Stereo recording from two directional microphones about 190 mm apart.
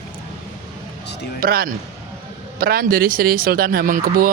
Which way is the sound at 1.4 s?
50° right (ahead or behind).